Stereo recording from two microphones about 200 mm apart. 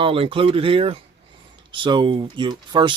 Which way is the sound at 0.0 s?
25° right (ahead or behind).